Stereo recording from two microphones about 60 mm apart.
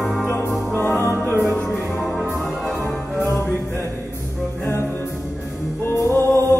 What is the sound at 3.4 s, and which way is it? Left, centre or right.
Music, left.